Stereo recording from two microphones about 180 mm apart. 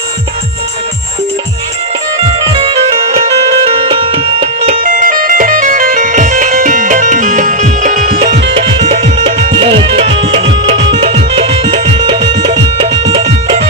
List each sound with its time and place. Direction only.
2.6 s music: 30° right (ahead or behind); by 8.4 s 50° right (ahead or behind)
8.5 s music: 30° right (ahead or behind)